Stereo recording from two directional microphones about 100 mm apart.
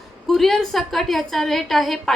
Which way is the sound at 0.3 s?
Centre (ahead or behind).